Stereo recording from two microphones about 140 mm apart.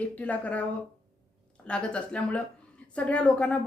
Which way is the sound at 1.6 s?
5° left (ahead or behind).